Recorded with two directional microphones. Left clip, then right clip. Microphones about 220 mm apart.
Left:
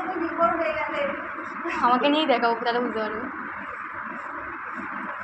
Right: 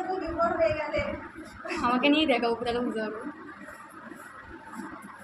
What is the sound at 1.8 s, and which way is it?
A woman's voice, 40° right (ahead or behind).